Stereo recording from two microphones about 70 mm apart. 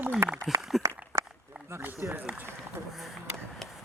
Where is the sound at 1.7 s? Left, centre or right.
Right.